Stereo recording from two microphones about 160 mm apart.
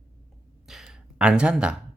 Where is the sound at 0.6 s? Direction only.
Centre (ahead or behind).